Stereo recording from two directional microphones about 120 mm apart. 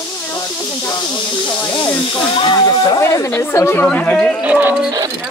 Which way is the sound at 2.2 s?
40° left (ahead or behind).